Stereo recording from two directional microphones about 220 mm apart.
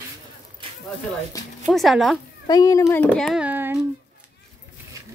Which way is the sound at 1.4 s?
15° left (ahead or behind).